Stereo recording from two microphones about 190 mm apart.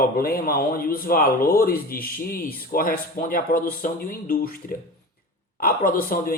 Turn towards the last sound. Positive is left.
turn(degrees=50)  # may be behind; listen again after turning